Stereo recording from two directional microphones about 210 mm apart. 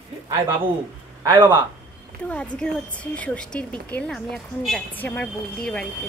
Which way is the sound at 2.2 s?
5° left (ahead or behind).